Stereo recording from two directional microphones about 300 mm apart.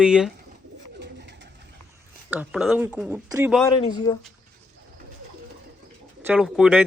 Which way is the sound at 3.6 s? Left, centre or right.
Centre.